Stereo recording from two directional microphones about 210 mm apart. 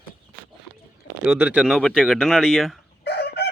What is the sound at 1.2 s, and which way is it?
Speech, 10° right (ahead or behind).